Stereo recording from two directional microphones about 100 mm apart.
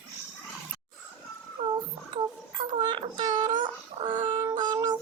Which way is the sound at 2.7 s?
50° right (ahead or behind).